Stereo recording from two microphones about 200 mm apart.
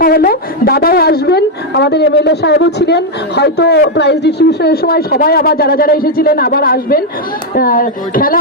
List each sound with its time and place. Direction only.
0.0 s a woman's voice: 45° left (ahead or behind)